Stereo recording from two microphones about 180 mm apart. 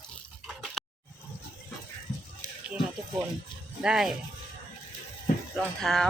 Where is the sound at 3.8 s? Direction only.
5° right (ahead or behind).